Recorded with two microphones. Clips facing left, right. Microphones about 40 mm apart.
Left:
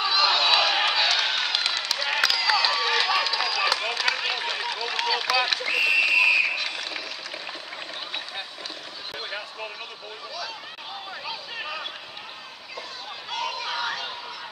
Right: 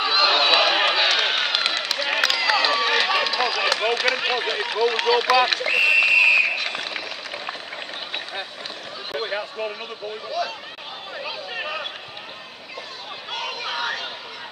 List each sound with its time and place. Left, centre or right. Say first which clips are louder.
0.0 s run: right 3 dB; right
9.1 s run: right 8 dB; centre
11.2 s a sound: right 5 dB; centre
13.3 s chatter: right 1 dB; right